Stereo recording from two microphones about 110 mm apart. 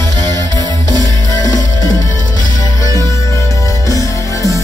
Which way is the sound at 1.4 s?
35° left (ahead or behind).